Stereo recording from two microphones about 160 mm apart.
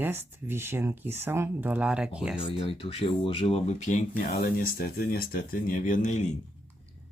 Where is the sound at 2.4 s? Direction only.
35° left (ahead or behind).